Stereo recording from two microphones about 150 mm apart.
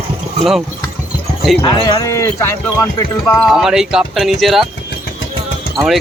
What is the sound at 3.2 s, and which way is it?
Speech, 10° left (ahead or behind).